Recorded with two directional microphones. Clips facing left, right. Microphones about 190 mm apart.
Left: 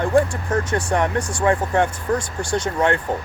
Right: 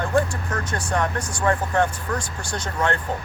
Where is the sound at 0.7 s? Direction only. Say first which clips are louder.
Left 2 dB; 20° left (ahead or behind).